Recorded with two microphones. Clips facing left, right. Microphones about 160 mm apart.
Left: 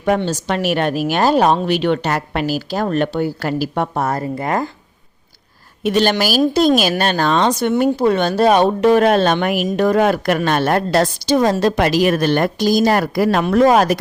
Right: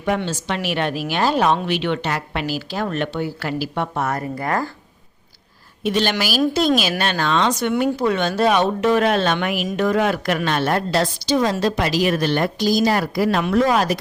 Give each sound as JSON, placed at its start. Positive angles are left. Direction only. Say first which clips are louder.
{"t": 0.2, "sound": "speech", "louder": "left 5 dB", "side_deg": 40}
{"t": 5.8, "sound": "a woman's voice", "louder": "left 5 dB", "side_deg": 45}